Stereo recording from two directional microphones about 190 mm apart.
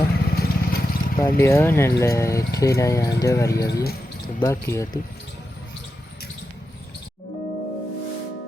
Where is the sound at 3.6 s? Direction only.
55° left (ahead or behind).